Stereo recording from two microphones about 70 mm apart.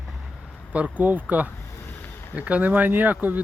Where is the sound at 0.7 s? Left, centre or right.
Centre.